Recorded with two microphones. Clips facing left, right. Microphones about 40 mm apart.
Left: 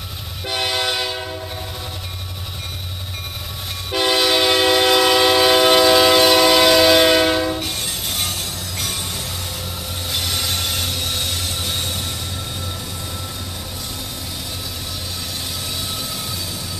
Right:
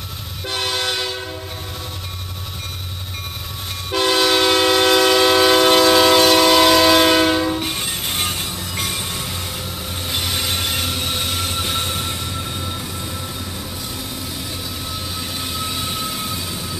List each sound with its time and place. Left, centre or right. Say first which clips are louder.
0.5 s train: left 1 dB; centre
3.9 s train: right 1 dB; centre
7.6 s train: right 2 dB; centre
15.6 s vehicle: right 3 dB; centre